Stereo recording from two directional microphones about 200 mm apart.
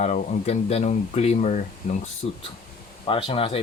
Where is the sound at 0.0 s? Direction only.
35° left (ahead or behind).